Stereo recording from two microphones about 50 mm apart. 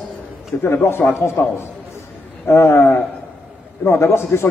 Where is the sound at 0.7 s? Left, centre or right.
Left.